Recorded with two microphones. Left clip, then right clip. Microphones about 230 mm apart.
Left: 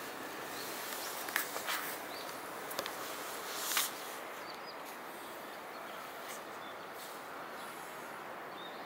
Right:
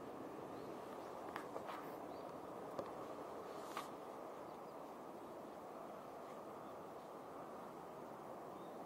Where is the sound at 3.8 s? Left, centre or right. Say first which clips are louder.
Left 14 dB; centre.